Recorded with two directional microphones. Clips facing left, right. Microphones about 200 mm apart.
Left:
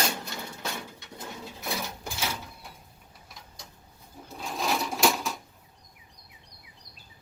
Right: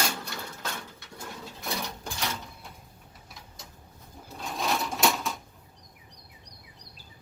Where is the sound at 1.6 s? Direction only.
Centre (ahead or behind).